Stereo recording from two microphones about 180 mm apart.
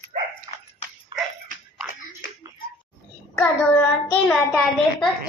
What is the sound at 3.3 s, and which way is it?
Child singing, 10° left (ahead or behind).